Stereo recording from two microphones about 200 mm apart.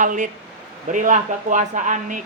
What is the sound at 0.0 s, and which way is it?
Speech, 40° right (ahead or behind).